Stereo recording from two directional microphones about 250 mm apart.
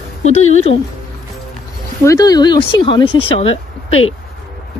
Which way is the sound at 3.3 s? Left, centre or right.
Left.